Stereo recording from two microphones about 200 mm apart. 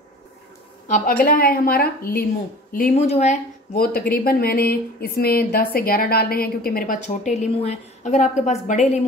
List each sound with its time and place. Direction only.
0.8 s speech: 40° left (ahead or behind)
3.1 s a woman's voice: 35° left (ahead or behind)
3.7 s speech: 50° left (ahead or behind)